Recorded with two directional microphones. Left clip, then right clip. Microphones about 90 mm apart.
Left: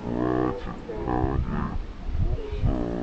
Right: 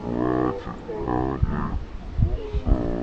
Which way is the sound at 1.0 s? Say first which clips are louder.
Right 2 dB; 10° left (ahead or behind).